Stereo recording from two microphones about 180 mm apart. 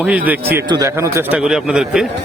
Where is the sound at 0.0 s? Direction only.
10° right (ahead or behind).